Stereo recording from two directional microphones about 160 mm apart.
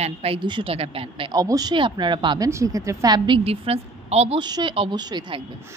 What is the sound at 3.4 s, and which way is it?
Speech, 40° right (ahead or behind).